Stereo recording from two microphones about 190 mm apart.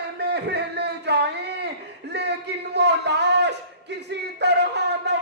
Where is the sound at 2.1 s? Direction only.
65° right (ahead or behind).